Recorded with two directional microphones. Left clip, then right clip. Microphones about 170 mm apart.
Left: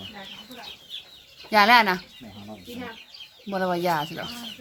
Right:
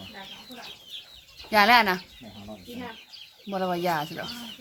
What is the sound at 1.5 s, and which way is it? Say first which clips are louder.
Speech: left 2 dB; centre (ahead or behind).